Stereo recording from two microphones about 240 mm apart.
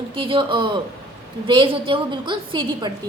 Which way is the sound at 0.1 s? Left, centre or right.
Right.